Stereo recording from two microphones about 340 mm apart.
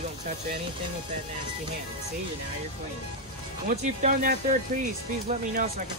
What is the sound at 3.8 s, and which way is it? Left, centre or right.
Speech, right.